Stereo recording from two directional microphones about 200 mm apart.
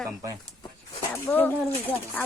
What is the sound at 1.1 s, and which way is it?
Speech, 10° left (ahead or behind).